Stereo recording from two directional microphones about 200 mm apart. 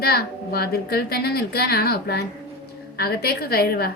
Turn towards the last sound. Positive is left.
turn(degrees=50)  # may be behind; listen again after turning